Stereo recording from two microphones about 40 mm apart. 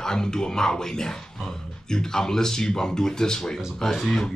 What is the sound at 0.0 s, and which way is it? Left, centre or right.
Speech, centre.